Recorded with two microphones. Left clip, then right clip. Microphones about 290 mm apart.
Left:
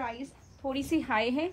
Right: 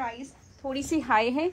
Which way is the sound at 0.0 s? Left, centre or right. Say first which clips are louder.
Right 2 dB; right.